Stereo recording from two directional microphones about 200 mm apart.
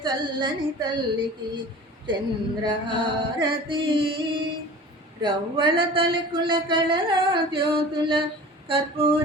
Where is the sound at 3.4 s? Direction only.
25° right (ahead or behind).